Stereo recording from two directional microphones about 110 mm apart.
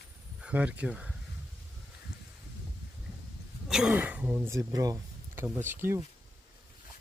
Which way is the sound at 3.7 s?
5° right (ahead or behind).